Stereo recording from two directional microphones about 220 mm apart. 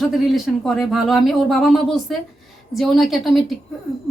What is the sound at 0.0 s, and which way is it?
Speech, centre (ahead or behind).